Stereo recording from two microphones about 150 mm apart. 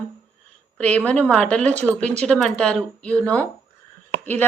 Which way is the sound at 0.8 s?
10° left (ahead or behind).